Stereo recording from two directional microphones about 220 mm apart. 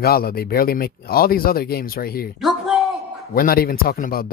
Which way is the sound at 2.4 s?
Centre (ahead or behind).